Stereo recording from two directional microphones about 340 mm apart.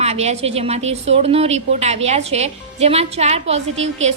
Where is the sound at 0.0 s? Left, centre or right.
Centre.